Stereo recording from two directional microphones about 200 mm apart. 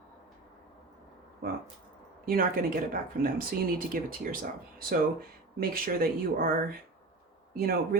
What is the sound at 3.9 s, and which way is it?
Speech, 45° right (ahead or behind).